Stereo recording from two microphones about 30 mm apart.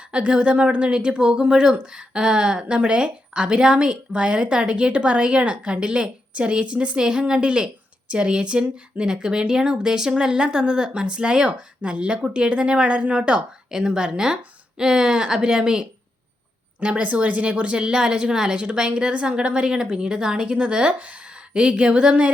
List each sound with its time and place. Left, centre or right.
0.1 s a woman's voice: right
7.0 s a woman's voice: right
13.3 s a woman's voice: right
16.9 s speech: right
17.7 s a woman's voice: right
21.0 s speech: right
21.2 s a woman's voice: right